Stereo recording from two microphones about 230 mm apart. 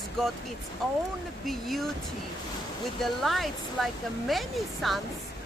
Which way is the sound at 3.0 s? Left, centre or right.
Centre.